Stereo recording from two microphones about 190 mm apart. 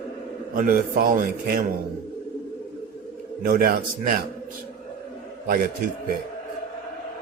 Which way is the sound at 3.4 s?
50° right (ahead or behind).